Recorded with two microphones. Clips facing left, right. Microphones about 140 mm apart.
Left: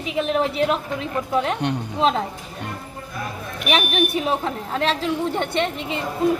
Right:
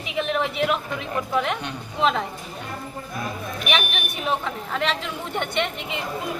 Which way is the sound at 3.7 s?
35° left (ahead or behind).